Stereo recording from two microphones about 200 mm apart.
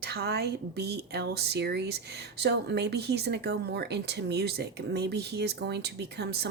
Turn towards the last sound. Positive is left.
turn(degrees=-55)  # may be behind; listen again after turning